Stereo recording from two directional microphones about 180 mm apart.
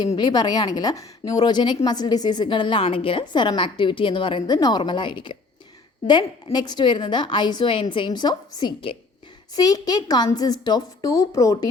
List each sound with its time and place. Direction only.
0.2 s a woman's voice: 25° left (ahead or behind)